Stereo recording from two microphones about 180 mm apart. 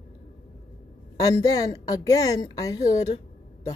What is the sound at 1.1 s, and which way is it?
A woman's voice, 20° left (ahead or behind).